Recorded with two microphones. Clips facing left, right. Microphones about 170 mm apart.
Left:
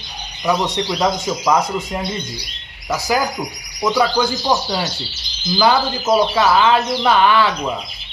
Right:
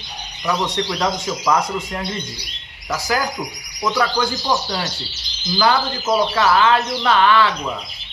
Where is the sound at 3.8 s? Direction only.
20° left (ahead or behind).